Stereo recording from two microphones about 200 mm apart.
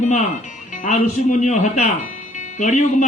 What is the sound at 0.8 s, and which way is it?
A man's voice, 40° left (ahead or behind).